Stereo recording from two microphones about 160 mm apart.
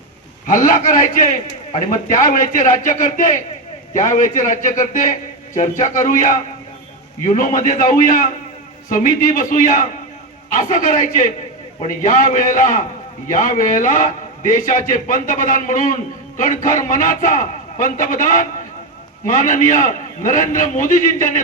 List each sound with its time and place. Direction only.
0.4 s a man's voice: 55° left (ahead or behind)